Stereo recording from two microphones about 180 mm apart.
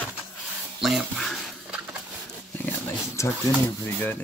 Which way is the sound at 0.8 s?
Centre (ahead or behind).